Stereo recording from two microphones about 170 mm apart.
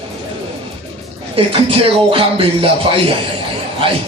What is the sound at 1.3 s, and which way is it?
Speech, 35° right (ahead or behind).